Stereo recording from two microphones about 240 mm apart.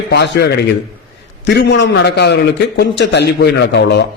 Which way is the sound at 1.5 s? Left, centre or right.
Left.